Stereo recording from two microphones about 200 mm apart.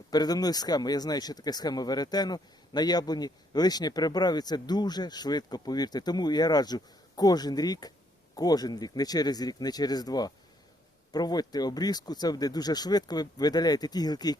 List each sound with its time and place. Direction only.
0.1 s speech: 20° left (ahead or behind)